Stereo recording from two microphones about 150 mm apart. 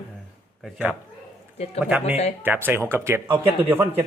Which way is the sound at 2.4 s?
15° right (ahead or behind).